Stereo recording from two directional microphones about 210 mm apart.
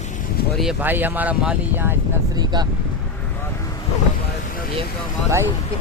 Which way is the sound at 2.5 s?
20° right (ahead or behind).